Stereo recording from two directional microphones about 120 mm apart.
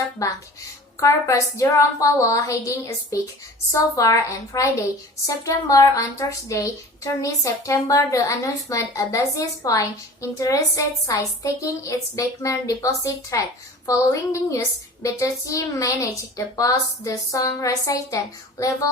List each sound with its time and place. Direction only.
0.9 s a woman's voice: 25° left (ahead or behind)